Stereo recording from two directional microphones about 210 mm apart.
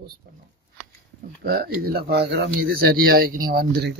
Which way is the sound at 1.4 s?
45° right (ahead or behind).